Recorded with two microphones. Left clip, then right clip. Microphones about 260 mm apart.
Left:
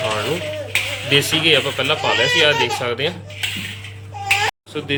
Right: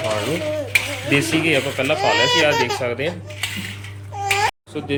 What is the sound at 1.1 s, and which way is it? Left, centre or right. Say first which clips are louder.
Speech: left 3 dB; centre.